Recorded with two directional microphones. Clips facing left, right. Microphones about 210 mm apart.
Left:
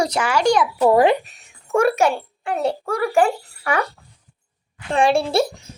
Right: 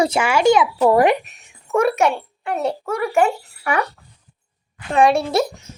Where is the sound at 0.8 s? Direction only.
25° left (ahead or behind).